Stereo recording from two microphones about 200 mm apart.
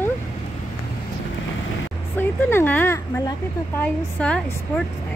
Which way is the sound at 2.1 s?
10° left (ahead or behind).